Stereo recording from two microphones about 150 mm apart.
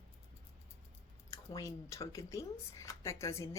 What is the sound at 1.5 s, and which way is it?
A woman's voice, 20° left (ahead or behind).